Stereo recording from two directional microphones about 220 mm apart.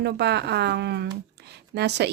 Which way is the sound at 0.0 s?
50° right (ahead or behind).